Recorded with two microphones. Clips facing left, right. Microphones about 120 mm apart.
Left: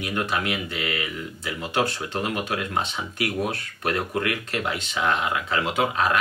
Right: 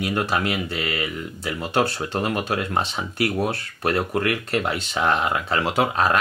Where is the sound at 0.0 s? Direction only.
35° right (ahead or behind).